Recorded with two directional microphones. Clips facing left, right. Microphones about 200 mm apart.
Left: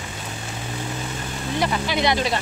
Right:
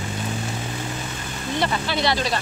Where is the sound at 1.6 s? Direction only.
15° left (ahead or behind).